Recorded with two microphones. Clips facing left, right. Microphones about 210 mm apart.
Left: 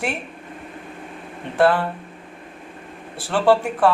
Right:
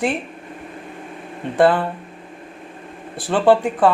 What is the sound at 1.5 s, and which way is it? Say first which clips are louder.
Speech: right 2 dB; 15° right (ahead or behind).